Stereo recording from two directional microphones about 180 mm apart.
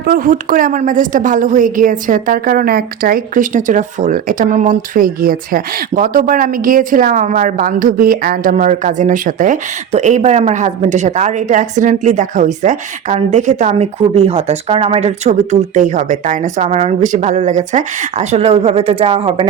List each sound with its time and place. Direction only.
0.0 s a woman's voice: 50° right (ahead or behind); by 19.5 s 30° right (ahead or behind)